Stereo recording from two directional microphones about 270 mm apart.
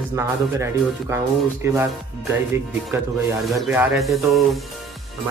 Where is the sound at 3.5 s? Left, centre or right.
Centre.